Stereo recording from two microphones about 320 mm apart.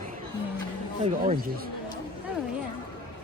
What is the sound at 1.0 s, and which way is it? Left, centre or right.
Speech, right.